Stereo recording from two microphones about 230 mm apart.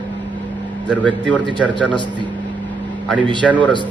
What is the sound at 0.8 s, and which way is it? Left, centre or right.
Speech, centre.